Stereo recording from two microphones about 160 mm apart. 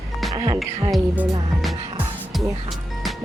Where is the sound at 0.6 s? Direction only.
Centre (ahead or behind).